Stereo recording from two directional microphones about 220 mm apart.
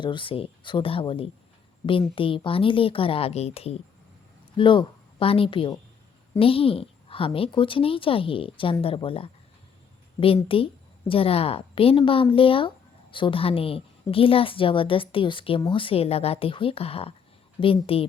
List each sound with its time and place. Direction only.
0.0 s speech: 20° left (ahead or behind)